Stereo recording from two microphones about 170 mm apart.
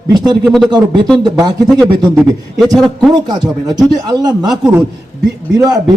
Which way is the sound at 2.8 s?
5° left (ahead or behind).